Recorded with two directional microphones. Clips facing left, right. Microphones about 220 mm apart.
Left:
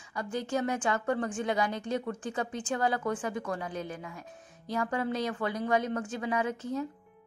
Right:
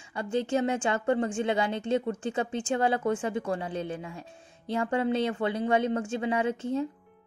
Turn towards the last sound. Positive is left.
turn(degrees=-25)  # may be behind; listen again after turning